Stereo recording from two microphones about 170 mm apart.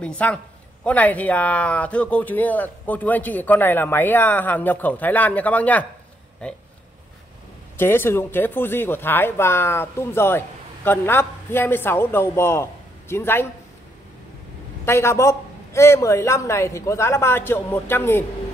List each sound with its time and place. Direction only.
0.0 s speech: 5° left (ahead or behind)
7.7 s speech: 15° left (ahead or behind)
14.9 s speech: 15° left (ahead or behind)